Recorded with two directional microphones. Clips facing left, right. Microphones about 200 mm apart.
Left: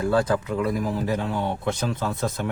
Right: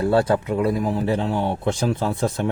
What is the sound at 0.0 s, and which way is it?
Speech, 30° right (ahead or behind).